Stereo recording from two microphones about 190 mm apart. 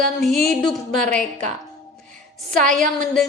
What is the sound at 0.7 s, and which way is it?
Speech, 5° left (ahead or behind).